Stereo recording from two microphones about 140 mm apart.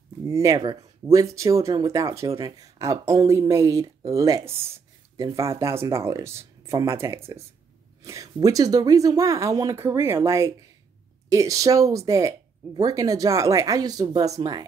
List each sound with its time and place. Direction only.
0.3 s speech: 25° right (ahead or behind)